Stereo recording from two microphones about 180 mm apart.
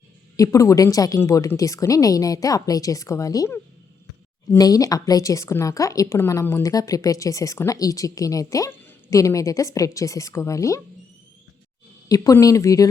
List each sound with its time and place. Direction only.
0.3 s a woman's voice: 20° left (ahead or behind)
12.0 s speech: 20° left (ahead or behind)